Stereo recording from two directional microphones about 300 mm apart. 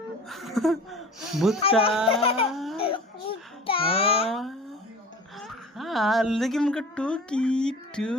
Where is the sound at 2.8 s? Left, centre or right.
Centre.